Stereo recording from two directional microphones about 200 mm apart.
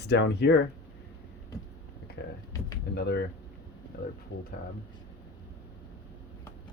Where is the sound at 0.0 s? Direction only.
60° left (ahead or behind).